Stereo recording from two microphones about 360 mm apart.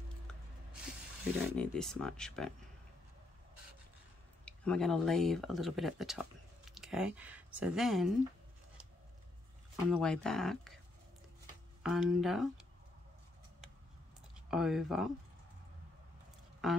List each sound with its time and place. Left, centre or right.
1.5 s speech: centre
4.5 s speech: centre
9.8 s speech: centre
11.8 s speech: centre
14.3 s speech: centre
16.6 s speech: centre